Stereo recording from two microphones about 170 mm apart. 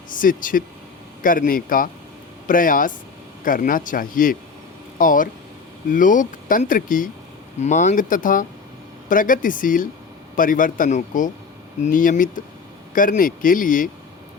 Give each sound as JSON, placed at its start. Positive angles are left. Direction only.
{"t": 0.1, "sound": "a man's voice", "side_deg": 50}